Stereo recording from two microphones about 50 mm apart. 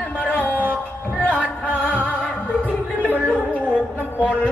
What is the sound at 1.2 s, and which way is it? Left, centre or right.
Music, left.